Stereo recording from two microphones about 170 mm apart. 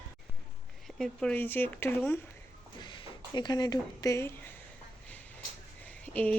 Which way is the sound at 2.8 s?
30° left (ahead or behind).